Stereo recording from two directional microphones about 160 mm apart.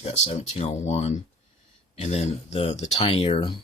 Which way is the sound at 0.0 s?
40° left (ahead or behind).